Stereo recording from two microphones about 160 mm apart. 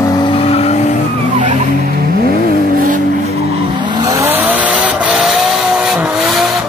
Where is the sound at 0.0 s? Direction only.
30° left (ahead or behind).